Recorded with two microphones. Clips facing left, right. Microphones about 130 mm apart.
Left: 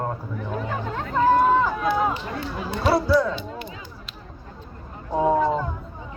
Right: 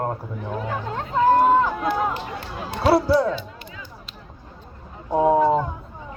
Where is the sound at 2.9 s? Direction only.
30° right (ahead or behind).